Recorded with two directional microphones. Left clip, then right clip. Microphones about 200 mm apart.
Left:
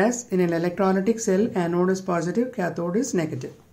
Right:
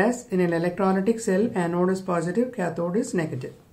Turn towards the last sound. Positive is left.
turn(degrees=15)  # may be behind; listen again after turning